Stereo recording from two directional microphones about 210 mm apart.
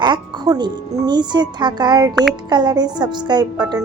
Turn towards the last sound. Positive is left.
turn(degrees=-20)  # may be behind; listen again after turning